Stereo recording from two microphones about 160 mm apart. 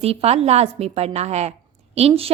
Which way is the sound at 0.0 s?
40° right (ahead or behind).